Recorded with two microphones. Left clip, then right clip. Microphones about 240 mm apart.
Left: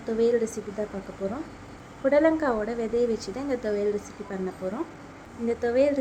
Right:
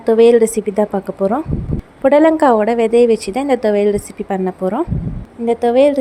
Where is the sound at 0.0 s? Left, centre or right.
Right.